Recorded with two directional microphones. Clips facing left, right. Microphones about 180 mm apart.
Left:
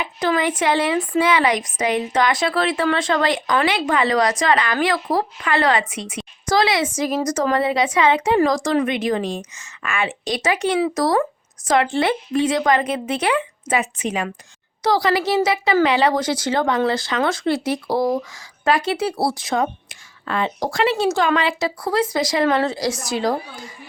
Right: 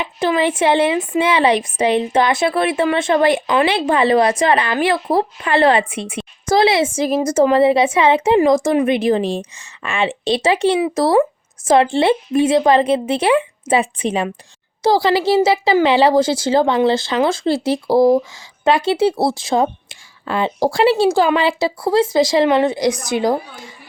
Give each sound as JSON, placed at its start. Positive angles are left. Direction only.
{"t": 0.0, "sound": "a woman's voice", "side_deg": -25}